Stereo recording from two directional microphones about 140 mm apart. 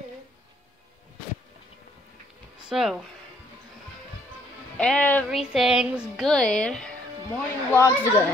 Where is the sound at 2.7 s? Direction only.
5° right (ahead or behind).